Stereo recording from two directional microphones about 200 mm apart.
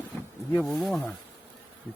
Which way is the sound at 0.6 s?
Centre (ahead or behind).